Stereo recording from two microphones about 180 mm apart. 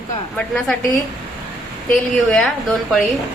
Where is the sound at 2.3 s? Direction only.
Centre (ahead or behind).